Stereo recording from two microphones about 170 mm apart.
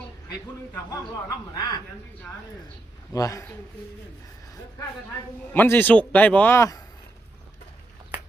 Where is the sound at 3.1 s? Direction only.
20° left (ahead or behind).